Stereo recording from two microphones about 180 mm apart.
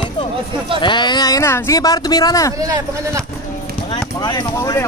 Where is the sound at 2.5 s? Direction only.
20° right (ahead or behind).